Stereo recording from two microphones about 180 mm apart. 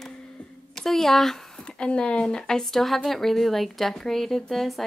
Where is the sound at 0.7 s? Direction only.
Centre (ahead or behind).